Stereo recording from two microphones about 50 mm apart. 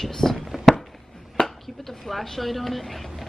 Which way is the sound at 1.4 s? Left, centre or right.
Centre.